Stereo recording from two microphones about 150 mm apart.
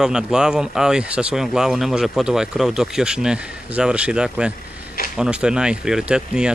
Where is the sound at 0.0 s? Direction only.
5° right (ahead or behind).